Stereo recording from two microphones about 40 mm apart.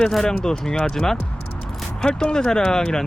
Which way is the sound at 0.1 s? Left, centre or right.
Centre.